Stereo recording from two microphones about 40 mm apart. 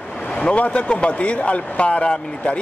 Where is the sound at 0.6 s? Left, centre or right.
Left.